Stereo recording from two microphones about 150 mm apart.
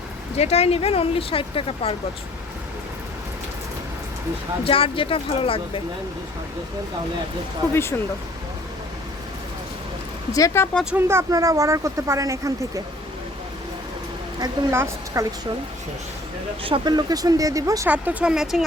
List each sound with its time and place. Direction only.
0.3 s speech: 45° left (ahead or behind)
4.6 s speech: 35° left (ahead or behind)
7.7 s speech: 15° left (ahead or behind)
10.3 s speech: 20° left (ahead or behind)
10.9 s speech: 15° right (ahead or behind)
14.3 s speech: 20° right (ahead or behind)
16.6 s speech: 30° right (ahead or behind)
17.8 s speech: 10° right (ahead or behind)